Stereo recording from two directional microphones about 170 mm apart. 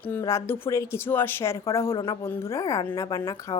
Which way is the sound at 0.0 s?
15° left (ahead or behind).